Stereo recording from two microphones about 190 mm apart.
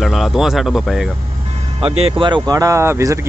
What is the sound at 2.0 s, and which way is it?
Speech, 25° right (ahead or behind).